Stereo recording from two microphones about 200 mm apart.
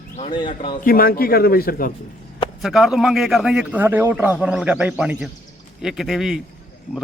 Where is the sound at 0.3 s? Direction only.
25° left (ahead or behind).